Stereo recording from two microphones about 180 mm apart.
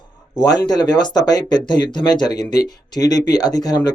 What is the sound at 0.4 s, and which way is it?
Speech, 20° left (ahead or behind).